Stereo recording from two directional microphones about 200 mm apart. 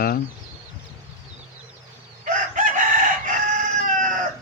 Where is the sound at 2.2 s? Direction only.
40° right (ahead or behind).